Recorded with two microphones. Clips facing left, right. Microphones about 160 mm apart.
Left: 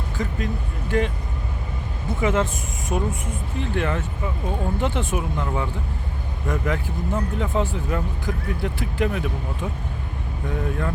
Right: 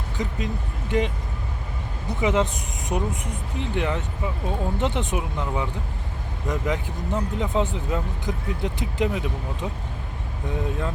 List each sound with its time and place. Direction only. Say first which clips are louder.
0.2 s speech: left 1 dB; 20° right (ahead or behind)
2.2 s speech: even; 15° right (ahead or behind)